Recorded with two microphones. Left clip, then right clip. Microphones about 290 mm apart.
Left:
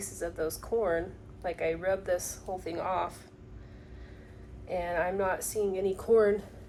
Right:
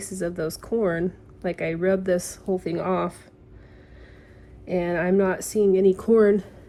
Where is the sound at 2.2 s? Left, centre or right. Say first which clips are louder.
Right 9 dB; right.